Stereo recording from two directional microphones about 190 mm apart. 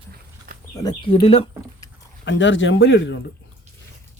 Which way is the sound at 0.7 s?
25° left (ahead or behind).